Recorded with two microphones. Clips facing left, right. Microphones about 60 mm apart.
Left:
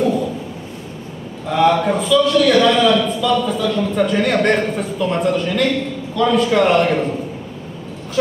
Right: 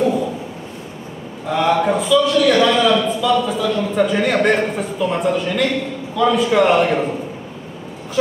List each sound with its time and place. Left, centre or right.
1.5 s a man's voice: centre